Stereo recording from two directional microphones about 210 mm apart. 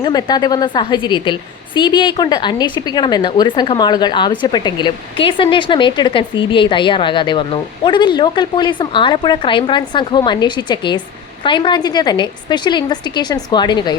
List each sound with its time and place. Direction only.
0.0 s a woman's voice: 20° left (ahead or behind)